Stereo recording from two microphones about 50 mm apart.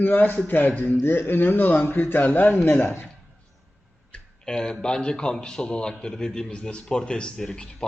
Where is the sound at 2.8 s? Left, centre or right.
Left.